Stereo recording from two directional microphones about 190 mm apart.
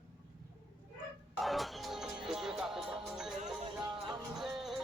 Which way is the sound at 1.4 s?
Centre (ahead or behind).